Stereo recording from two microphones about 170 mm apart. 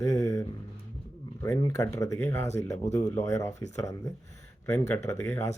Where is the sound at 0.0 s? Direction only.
15° left (ahead or behind).